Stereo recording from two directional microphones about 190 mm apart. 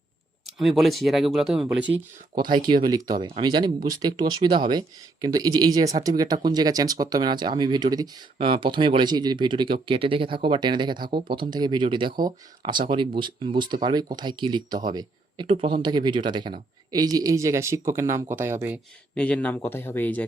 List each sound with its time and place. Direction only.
0.6 s speech: centre (ahead or behind)
2.3 s speech: 25° right (ahead or behind)
19.1 s speech: 5° left (ahead or behind)